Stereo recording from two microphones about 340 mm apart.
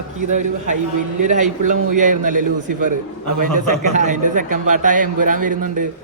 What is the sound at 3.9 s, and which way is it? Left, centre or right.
A man's voice, right.